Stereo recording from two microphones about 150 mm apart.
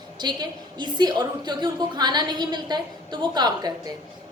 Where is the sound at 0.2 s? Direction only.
30° right (ahead or behind).